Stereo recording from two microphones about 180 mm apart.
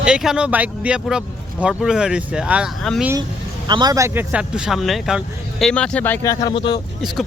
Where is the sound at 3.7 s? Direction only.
25° right (ahead or behind); by 6.3 s 10° left (ahead or behind).